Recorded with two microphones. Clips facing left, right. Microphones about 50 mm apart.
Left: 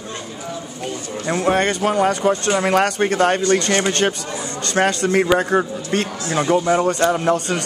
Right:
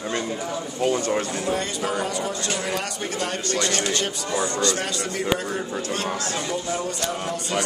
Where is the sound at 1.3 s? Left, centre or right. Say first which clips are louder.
Left 8 dB; left.